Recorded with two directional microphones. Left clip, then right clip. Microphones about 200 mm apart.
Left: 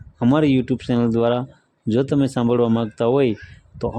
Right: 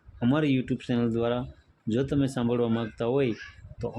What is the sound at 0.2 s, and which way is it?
Speech, 35° left (ahead or behind).